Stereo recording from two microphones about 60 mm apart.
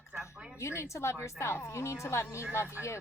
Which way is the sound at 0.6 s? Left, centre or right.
Left.